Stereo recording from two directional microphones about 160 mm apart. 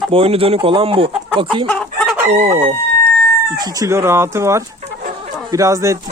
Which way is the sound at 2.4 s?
40° right (ahead or behind).